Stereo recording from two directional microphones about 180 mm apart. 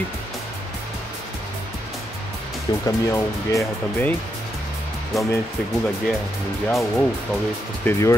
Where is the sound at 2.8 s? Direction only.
15° left (ahead or behind).